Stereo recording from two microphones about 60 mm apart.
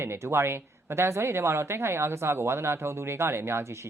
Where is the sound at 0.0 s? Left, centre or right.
Right.